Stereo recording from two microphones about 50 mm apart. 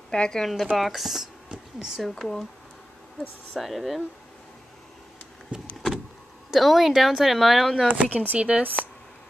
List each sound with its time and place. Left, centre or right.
0.1 s a woman's voice: centre
1.5 s a sound: centre
2.0 s a woman's voice: centre
5.5 s vehicle: right
6.5 s a woman's voice: centre
7.9 s speech: right